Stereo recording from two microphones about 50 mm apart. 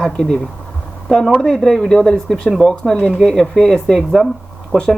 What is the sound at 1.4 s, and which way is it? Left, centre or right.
Speech, centre.